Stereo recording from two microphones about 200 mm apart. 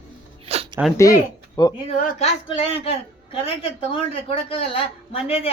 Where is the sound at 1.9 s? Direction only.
40° left (ahead or behind).